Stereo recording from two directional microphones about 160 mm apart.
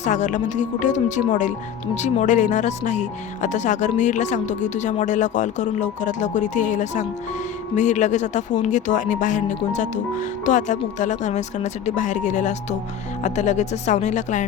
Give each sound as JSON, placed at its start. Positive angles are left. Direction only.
{"t": 0.0, "sound": "speech", "side_deg": 50}